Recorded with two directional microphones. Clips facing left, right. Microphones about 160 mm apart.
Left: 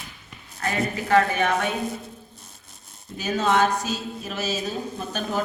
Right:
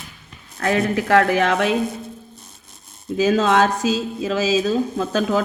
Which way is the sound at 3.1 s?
90° right.